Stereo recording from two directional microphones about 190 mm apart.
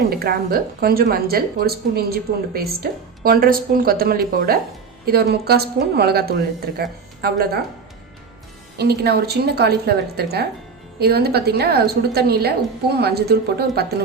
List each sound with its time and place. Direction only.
0.1 s a sound: 55° right (ahead or behind)
0.8 s a woman's voice: 55° right (ahead or behind)
8.8 s a woman's voice: 55° right (ahead or behind)